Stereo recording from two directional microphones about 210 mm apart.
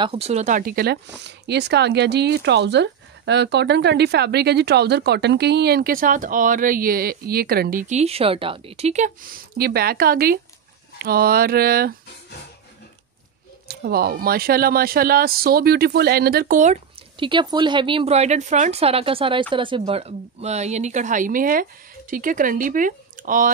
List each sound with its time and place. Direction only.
0.0 s speech: 25° right (ahead or behind); by 11.9 s 45° right (ahead or behind)
13.7 s speech: 45° right (ahead or behind)